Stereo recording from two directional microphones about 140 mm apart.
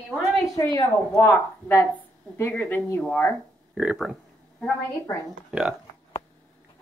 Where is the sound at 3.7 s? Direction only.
5° right (ahead or behind).